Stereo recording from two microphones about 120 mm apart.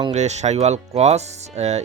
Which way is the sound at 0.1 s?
70° right (ahead or behind).